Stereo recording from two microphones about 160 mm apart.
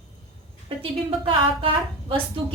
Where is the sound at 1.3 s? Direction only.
35° right (ahead or behind).